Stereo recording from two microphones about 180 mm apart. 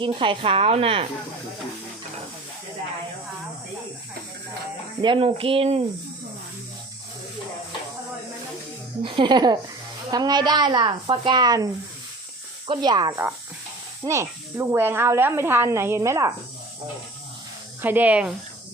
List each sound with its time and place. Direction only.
0.0 s a woman's voice: 25° right (ahead or behind)
5.0 s a woman's voice: 30° right (ahead or behind)
9.0 s a woman's voice: 25° right (ahead or behind)
17.8 s speech: 10° right (ahead or behind)